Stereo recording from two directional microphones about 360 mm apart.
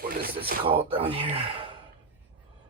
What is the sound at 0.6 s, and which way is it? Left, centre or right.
Speech, centre.